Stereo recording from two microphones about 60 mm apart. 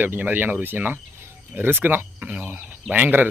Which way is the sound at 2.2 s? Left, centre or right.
Right.